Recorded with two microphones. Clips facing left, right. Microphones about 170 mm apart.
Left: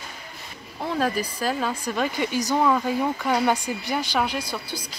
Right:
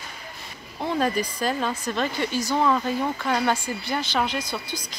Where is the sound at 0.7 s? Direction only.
Centre (ahead or behind).